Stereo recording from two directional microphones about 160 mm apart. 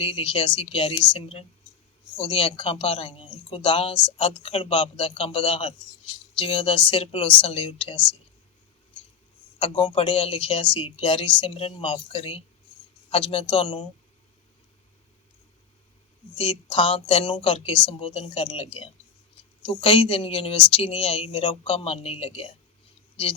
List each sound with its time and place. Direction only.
0.0 s speech: 35° left (ahead or behind)
9.6 s speech: 30° left (ahead or behind)
16.4 s speech: 35° left (ahead or behind)